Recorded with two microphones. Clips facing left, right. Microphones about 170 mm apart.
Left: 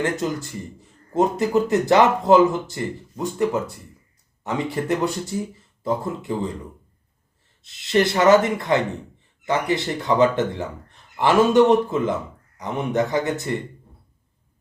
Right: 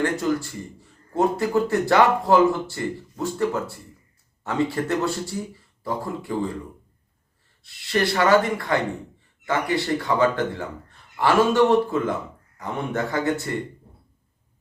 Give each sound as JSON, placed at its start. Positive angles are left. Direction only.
{"t": 0.0, "sound": "speech", "side_deg": 20}
{"t": 7.6, "sound": "speech", "side_deg": 20}